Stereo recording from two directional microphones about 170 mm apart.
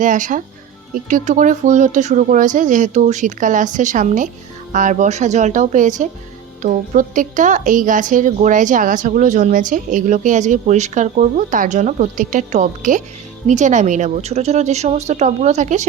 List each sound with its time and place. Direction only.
0.0 s a woman's voice: 50° right (ahead or behind)